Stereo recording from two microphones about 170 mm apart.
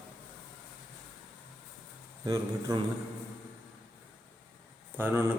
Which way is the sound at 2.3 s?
20° right (ahead or behind).